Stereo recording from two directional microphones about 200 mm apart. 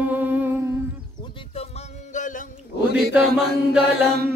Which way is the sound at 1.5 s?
30° left (ahead or behind).